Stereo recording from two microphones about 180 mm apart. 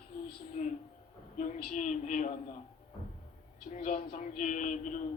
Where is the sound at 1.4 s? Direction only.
45° left (ahead or behind).